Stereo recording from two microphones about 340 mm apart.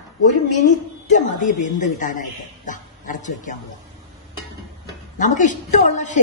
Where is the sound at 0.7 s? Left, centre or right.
Left.